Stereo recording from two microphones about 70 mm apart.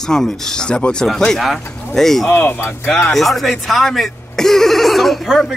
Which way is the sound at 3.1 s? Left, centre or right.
Centre.